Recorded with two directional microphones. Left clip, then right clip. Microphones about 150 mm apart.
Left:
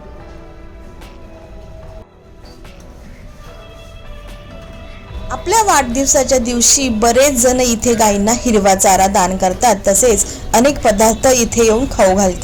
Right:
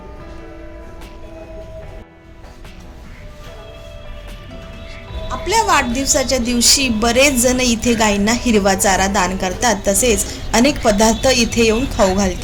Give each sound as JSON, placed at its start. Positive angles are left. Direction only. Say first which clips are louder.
{"t": 5.3, "sound": "a woman's voice", "louder": "left 2 dB", "side_deg": 25}